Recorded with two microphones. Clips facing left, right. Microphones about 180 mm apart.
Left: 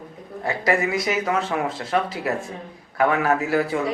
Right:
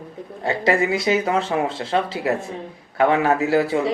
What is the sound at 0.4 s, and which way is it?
Speech, 25° right (ahead or behind).